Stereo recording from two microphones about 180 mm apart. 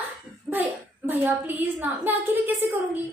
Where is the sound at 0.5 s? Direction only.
10° right (ahead or behind).